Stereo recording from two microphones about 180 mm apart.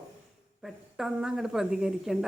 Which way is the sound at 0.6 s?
5° right (ahead or behind).